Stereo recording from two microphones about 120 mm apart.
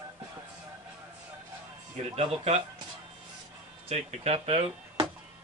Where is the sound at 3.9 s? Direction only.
60° right (ahead or behind).